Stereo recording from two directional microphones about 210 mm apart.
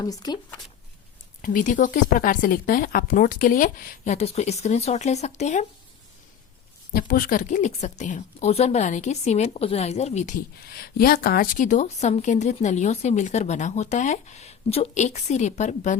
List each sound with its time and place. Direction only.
0.0 s speech: 20° left (ahead or behind)
1.4 s a woman's voice: 40° left (ahead or behind)
6.9 s a woman's voice: 45° left (ahead or behind)